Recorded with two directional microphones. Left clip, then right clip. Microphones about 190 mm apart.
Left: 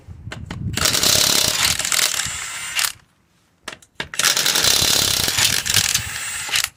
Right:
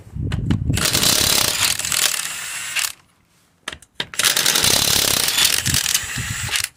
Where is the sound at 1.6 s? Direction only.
20° right (ahead or behind).